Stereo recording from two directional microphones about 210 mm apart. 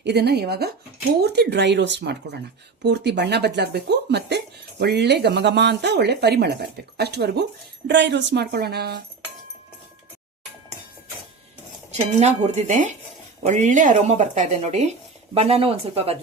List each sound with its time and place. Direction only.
0.0 s speech: 50° right (ahead or behind)
11.9 s speech: 30° right (ahead or behind)